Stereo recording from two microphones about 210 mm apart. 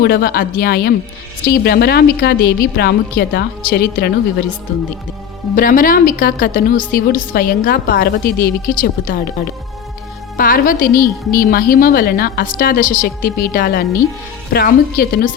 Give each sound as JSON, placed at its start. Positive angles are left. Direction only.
{"t": 0.0, "sound": "a woman's voice", "side_deg": 45}
{"t": 5.5, "sound": "a woman's voice", "side_deg": 40}
{"t": 10.8, "sound": "a woman's voice", "side_deg": 15}
{"t": 11.3, "sound": "a woman's voice", "side_deg": 45}